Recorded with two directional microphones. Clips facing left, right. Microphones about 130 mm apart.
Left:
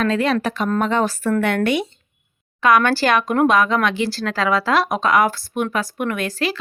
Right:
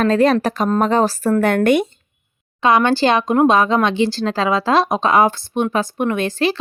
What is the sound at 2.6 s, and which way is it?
Speech, 25° right (ahead or behind).